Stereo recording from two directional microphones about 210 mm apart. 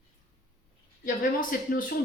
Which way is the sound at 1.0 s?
40° left (ahead or behind).